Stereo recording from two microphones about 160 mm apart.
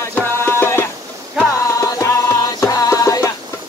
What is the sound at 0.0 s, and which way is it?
Music, 15° left (ahead or behind).